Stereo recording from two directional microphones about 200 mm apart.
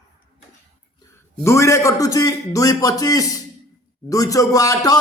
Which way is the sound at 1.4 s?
15° left (ahead or behind).